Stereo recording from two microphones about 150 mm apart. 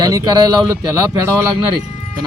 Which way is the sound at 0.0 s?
25° right (ahead or behind).